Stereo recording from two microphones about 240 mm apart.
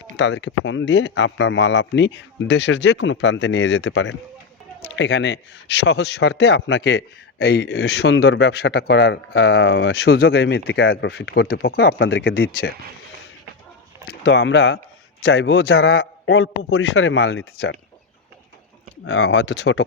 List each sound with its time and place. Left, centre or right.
0.2 s a man's voice: left
14.1 s a man's voice: left
19.0 s a man's voice: left